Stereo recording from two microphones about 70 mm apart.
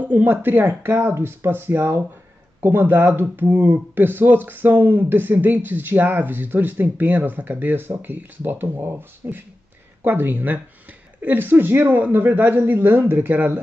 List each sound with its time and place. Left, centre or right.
0.0 s speech: right